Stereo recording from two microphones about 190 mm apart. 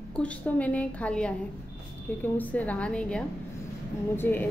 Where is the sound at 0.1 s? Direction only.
5° left (ahead or behind).